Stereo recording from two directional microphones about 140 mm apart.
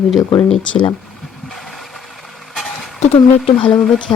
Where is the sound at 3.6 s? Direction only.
5° left (ahead or behind).